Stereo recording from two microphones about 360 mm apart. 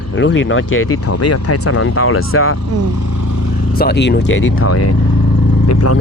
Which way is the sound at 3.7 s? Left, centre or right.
Left.